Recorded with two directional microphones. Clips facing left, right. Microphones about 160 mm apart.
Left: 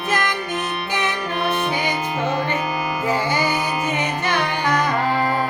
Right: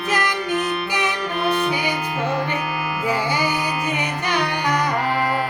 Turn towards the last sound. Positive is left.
turn(degrees=-15)  # may be behind; listen again after turning